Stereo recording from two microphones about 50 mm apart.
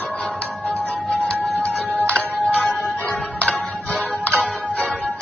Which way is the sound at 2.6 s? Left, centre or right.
Centre.